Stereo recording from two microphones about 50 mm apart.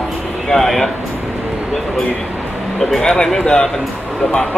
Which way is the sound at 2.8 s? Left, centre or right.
Centre.